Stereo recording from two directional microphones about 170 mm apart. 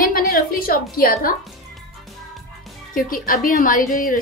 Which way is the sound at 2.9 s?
55° left (ahead or behind).